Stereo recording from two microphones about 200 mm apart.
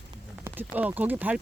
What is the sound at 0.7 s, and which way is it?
Speech, 10° right (ahead or behind).